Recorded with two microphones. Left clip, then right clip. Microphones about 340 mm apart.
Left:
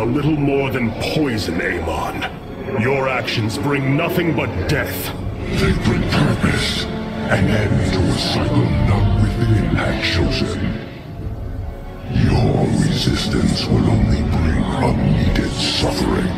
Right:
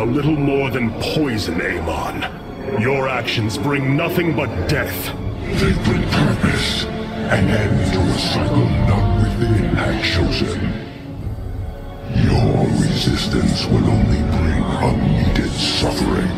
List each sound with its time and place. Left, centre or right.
0.0 s speech: centre
12.2 s speech: centre